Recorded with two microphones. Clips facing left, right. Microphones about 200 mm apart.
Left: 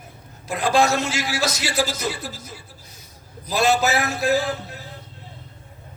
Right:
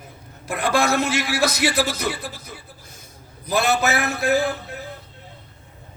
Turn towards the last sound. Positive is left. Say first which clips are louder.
# right 1 dB
turn(degrees=-60)  # may be behind; listen again after turning